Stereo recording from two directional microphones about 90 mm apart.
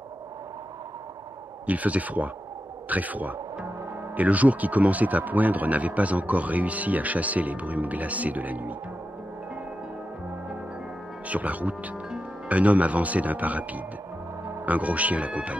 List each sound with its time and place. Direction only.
1.7 s speech: 15° right (ahead or behind)
11.2 s speech: 15° right (ahead or behind)